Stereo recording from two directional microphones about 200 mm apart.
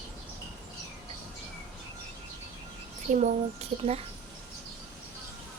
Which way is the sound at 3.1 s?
40° right (ahead or behind).